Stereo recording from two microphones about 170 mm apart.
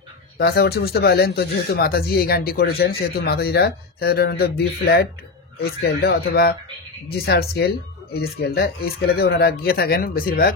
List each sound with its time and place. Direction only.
0.4 s speech: 70° left (ahead or behind)